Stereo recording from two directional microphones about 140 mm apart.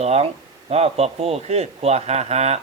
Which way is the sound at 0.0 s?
50° right (ahead or behind).